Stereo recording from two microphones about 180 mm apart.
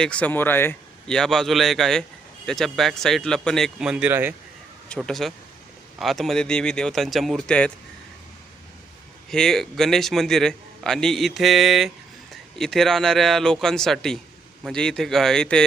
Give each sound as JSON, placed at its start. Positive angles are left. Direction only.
{"t": 0.0, "sound": "a man's voice", "side_deg": 5}
{"t": 4.9, "sound": "a man's voice", "side_deg": 5}
{"t": 9.3, "sound": "a man's voice", "side_deg": 5}